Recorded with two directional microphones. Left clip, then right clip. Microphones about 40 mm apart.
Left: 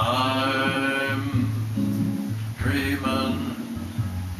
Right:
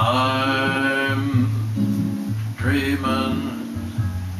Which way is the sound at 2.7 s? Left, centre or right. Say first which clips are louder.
Right 4 dB; centre.